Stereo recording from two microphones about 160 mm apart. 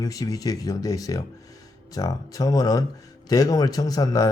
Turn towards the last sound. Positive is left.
turn(degrees=25)  # may be behind; listen again after turning